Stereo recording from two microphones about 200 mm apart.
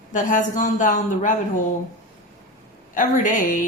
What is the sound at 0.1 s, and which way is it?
A woman's voice, 40° left (ahead or behind).